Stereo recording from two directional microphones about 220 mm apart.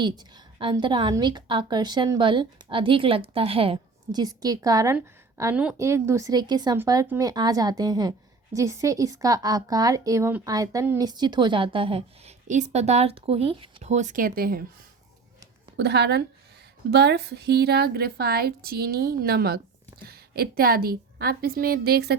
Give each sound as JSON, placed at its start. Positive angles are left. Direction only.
{"t": 0.0, "sound": "a woman's voice", "side_deg": -20}
{"t": 15.8, "sound": "a woman's voice", "side_deg": -50}